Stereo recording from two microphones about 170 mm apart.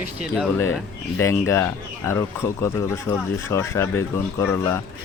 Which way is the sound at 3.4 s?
15° left (ahead or behind).